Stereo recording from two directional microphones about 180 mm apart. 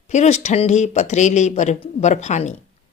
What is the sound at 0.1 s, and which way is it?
Speech, 40° left (ahead or behind).